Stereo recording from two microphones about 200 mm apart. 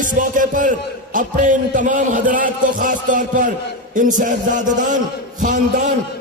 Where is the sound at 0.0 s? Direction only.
40° right (ahead or behind).